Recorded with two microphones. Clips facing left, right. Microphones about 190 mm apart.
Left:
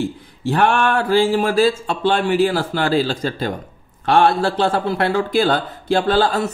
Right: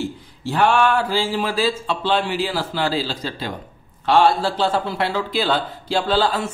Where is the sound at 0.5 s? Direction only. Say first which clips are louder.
Left 1 dB; 55° left (ahead or behind).